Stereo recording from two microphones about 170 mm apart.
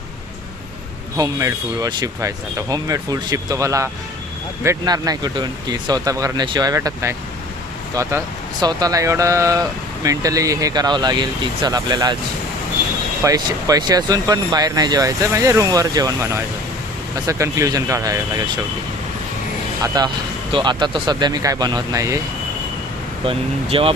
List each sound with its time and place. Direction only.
1.1 s speech: 20° right (ahead or behind)
13.2 s speech: 20° right (ahead or behind)
19.8 s speech: 20° right (ahead or behind)
23.2 s speech: 30° right (ahead or behind)